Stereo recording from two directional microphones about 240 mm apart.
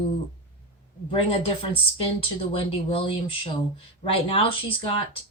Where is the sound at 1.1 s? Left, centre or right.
Left.